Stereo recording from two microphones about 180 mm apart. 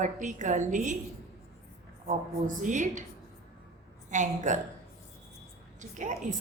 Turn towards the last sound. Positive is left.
turn(degrees=-45)  # may be behind; listen again after turning